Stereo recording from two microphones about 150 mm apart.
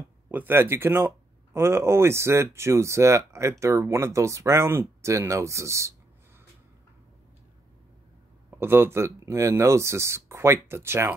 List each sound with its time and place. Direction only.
0.3 s speech: 15° right (ahead or behind)
8.5 s speech: 15° right (ahead or behind)